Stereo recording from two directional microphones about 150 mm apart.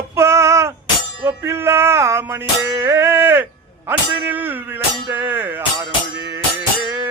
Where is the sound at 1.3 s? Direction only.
15° right (ahead or behind).